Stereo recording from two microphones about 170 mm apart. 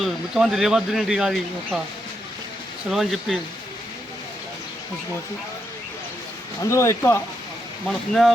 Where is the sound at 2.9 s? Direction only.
Centre (ahead or behind).